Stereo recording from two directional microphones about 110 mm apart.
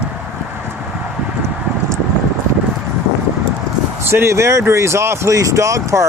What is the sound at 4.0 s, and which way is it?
Speech, 20° right (ahead or behind).